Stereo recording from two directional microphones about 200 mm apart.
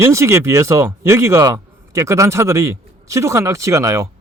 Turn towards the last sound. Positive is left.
turn(degrees=-15)  # may be behind; listen again after turning